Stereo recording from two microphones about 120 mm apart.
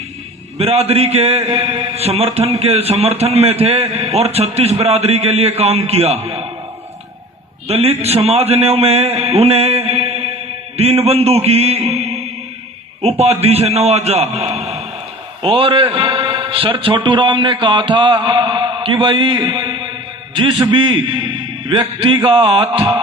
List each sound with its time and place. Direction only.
0.6 s a man's voice: 60° right (ahead or behind)
7.7 s a man's voice: 60° right (ahead or behind)
15.4 s a man's voice: 50° right (ahead or behind)
18.9 s a sound: 35° right (ahead or behind)
20.7 s a man's voice: 45° right (ahead or behind)